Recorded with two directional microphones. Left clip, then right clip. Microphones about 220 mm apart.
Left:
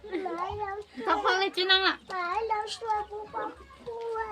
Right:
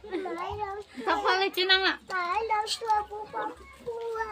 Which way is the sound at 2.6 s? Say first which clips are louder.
Right 3 dB; 50° right (ahead or behind).